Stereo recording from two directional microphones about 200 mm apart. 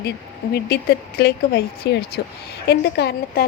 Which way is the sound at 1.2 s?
50° left (ahead or behind).